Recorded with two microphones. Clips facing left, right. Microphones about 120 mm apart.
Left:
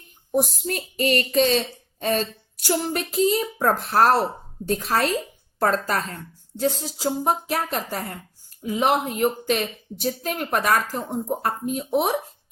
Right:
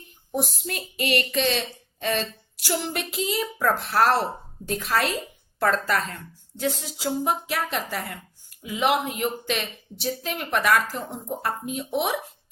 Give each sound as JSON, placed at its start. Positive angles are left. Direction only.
{"t": 0.6, "sound": "a child's voice", "side_deg": 40}